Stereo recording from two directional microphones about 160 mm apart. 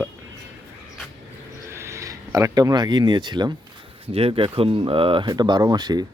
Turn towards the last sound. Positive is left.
turn(degrees=-25)  # may be behind; listen again after turning